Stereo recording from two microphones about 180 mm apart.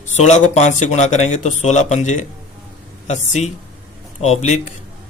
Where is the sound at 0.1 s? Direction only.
40° left (ahead or behind).